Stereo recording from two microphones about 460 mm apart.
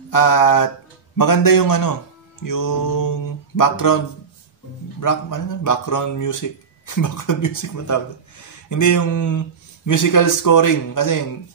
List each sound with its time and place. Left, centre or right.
0.1 s mantra: left
5.0 s speech: left